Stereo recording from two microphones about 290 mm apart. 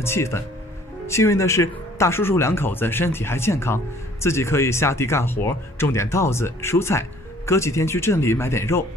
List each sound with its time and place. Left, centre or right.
0.0 s speech: centre